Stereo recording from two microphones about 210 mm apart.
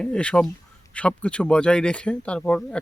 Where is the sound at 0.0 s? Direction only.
5° left (ahead or behind).